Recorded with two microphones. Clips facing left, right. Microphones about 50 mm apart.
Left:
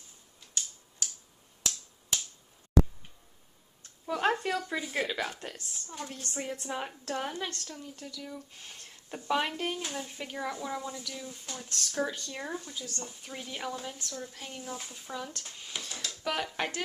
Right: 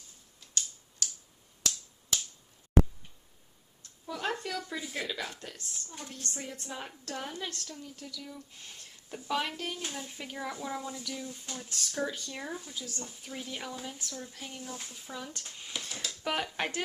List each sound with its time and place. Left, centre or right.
0.3 s typewriter: centre
4.0 s a woman's voice: left; by 8.2 s centre
8.2 s a woman's voice: centre
15.0 s speech: centre
15.9 s a sound: centre
16.2 s speech: centre